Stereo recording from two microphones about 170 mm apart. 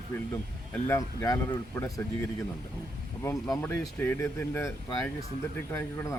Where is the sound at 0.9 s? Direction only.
20° left (ahead or behind).